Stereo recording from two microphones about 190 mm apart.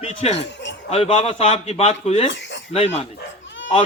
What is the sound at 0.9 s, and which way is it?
A man's voice, 35° left (ahead or behind).